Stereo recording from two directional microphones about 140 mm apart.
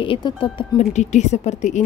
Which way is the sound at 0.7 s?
55° left (ahead or behind).